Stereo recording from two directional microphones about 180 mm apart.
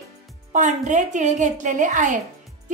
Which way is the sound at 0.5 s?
45° right (ahead or behind).